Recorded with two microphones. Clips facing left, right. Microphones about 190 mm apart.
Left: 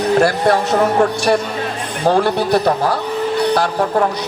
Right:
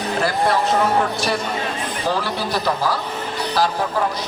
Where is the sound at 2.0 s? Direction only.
65° left (ahead or behind).